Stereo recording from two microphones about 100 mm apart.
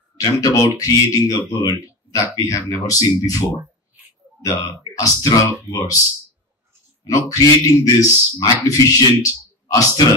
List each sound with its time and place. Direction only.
0.2 s speech: 40° left (ahead or behind)
1.7 s grunt: 35° left (ahead or behind)
2.3 s speech: 30° left (ahead or behind)
7.1 s speech: 35° left (ahead or behind)